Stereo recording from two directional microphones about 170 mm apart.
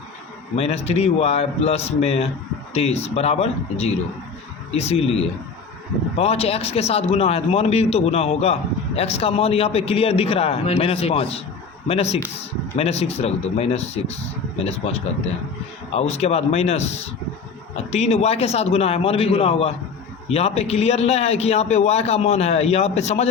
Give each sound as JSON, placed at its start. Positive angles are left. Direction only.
{"t": 0.5, "sound": "a man's voice", "side_deg": 35}